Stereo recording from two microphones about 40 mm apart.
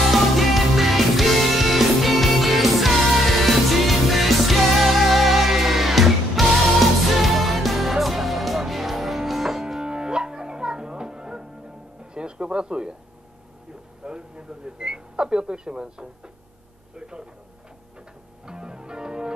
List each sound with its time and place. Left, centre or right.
0.0 s music: centre
9.8 s music: right
14.0 s a sound: right
16.9 s speech: right
18.4 s music: centre